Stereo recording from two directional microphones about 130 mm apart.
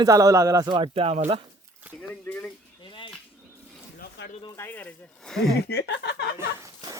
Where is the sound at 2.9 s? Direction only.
40° left (ahead or behind).